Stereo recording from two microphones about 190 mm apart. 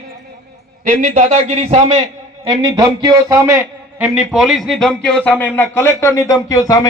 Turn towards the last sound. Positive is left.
turn(degrees=15)  # may be behind; listen again after turning